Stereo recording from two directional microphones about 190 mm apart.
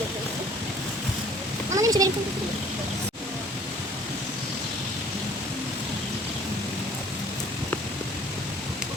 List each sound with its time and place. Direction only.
1.7 s a child's voice: 20° right (ahead or behind)